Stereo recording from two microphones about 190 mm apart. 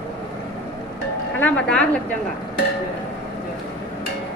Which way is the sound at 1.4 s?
5° left (ahead or behind).